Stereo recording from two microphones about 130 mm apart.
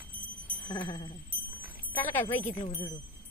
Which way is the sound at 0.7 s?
35° left (ahead or behind).